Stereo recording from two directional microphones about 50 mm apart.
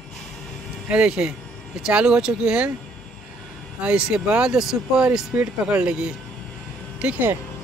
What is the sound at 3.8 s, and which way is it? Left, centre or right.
Speech, right.